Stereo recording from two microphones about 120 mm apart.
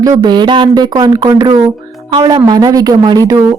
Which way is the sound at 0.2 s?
40° right (ahead or behind).